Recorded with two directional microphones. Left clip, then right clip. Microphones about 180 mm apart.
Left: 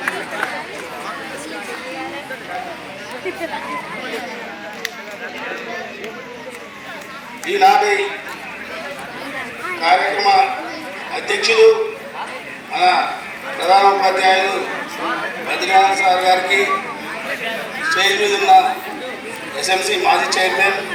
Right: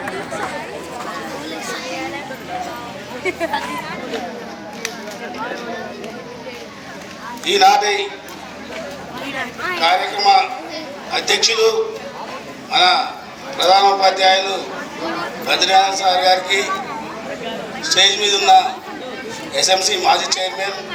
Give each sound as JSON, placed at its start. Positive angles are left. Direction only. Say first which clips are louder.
{"t": 7.4, "sound": "a man's voice", "louder": "even", "side_deg": -15}
{"t": 9.8, "sound": "a man's voice", "louder": "left 1 dB", "side_deg": -15}
{"t": 12.7, "sound": "a man's voice", "louder": "right 1 dB", "side_deg": -15}
{"t": 15.4, "sound": "a man's voice", "louder": "even", "side_deg": -15}
{"t": 17.9, "sound": "a man's voice", "louder": "right 2 dB", "side_deg": -15}
{"t": 19.6, "sound": "a man's voice", "louder": "right 1 dB", "side_deg": -15}